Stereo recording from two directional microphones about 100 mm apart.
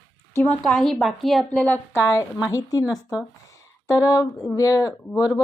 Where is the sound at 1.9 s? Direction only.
30° left (ahead or behind).